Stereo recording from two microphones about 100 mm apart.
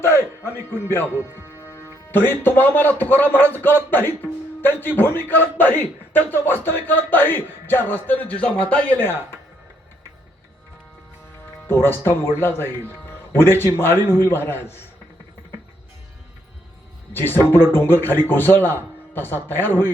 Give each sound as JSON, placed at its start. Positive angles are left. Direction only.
{"t": 0.0, "sound": "music", "side_deg": 25}
{"t": 1.6, "sound": "a man's voice", "side_deg": 25}
{"t": 11.7, "sound": "speech", "side_deg": 20}
{"t": 12.9, "sound": "music", "side_deg": 20}
{"t": 13.7, "sound": "speech", "side_deg": 25}
{"t": 17.2, "sound": "speech", "side_deg": 20}